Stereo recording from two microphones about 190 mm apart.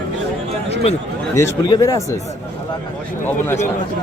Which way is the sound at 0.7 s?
35° left (ahead or behind).